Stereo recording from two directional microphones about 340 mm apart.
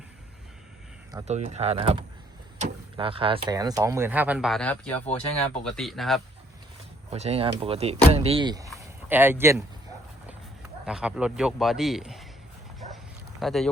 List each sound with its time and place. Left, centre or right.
1.1 s a man's voice: centre
7.1 s speech: centre
10.8 s a man's voice: centre
12.8 s dog: centre
13.4 s a man's voice: centre